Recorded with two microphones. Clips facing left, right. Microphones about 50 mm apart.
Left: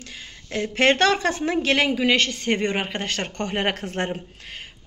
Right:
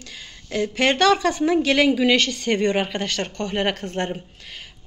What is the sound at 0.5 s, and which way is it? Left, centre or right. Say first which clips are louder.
Speech: left 1 dB; left.